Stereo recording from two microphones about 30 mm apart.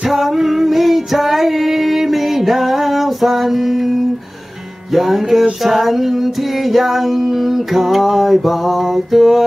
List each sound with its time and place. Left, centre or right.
0.1 s female singing: centre
4.9 s music: centre